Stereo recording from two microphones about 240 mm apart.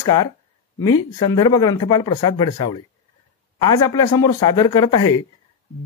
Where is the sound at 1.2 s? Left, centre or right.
Centre.